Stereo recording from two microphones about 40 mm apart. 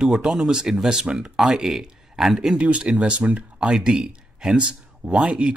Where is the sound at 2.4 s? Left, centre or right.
Right.